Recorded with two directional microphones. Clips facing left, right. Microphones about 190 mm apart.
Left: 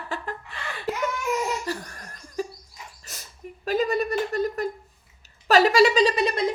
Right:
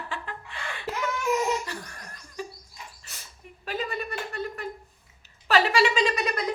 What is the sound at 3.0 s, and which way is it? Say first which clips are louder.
Dog: left 4 dB; 40° left (ahead or behind).